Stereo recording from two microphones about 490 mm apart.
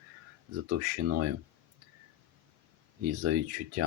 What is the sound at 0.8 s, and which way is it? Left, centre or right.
Speech, right.